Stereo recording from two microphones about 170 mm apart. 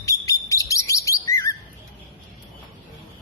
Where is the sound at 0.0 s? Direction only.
20° left (ahead or behind).